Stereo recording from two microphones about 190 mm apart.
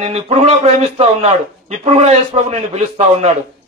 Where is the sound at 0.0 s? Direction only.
35° right (ahead or behind).